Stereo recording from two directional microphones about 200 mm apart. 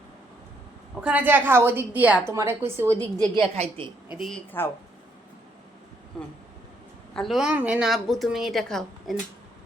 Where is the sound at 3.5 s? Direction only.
30° right (ahead or behind).